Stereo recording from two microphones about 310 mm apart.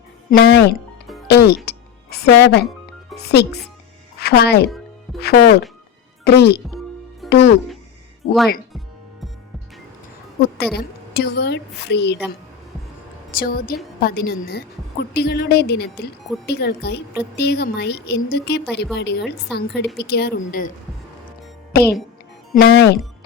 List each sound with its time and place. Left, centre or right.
0.3 s a woman's voice: left
10.8 s a woman's voice: left
13.3 s a woman's voice: left